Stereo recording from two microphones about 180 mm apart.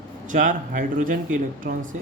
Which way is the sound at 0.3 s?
45° right (ahead or behind).